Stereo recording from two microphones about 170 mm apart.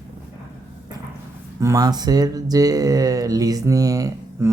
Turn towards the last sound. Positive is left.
turn(degrees=-20)  # may be behind; listen again after turning